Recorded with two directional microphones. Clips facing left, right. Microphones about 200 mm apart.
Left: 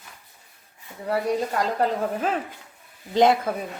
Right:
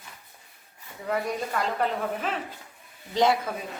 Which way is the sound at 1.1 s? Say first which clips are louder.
Left 4 dB; 35° left (ahead or behind).